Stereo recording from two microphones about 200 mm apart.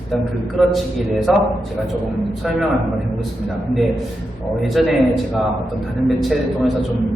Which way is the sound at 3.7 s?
Centre (ahead or behind).